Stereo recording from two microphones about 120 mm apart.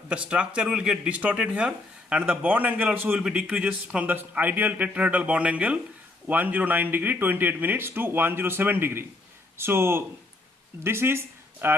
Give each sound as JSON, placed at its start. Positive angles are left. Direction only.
{"t": 0.1, "sound": "speech", "side_deg": -10}